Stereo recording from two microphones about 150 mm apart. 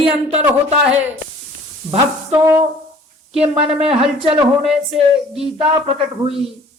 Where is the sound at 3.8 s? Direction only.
40° right (ahead or behind).